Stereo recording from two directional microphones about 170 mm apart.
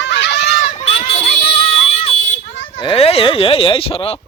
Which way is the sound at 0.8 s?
35° left (ahead or behind).